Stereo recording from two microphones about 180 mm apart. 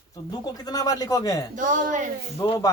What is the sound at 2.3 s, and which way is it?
Speech, 20° left (ahead or behind).